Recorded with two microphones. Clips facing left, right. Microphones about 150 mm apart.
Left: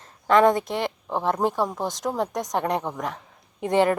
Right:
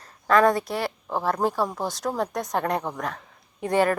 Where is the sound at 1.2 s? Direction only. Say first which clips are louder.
Left 1 dB; 20° left (ahead or behind).